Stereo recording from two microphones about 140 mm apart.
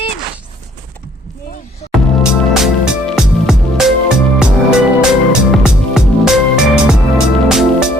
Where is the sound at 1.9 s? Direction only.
Centre (ahead or behind).